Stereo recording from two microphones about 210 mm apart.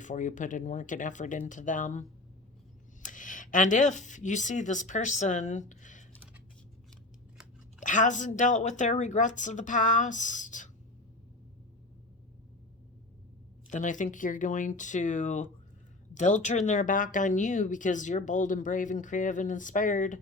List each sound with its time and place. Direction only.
0.0 s speech: 35° left (ahead or behind)
7.8 s speech: 35° left (ahead or behind)
13.7 s speech: 35° left (ahead or behind)